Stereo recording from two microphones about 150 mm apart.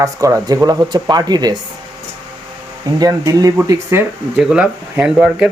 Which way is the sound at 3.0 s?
25° right (ahead or behind).